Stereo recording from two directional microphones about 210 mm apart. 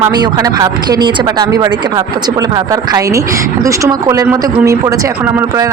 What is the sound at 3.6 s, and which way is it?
Speech, 15° right (ahead or behind).